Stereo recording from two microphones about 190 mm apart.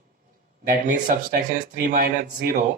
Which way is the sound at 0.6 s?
45° right (ahead or behind).